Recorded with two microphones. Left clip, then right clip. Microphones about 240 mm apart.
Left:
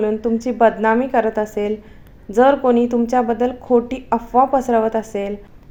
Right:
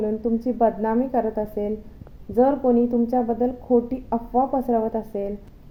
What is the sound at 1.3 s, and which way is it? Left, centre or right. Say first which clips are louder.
Speech: left 6 dB; left.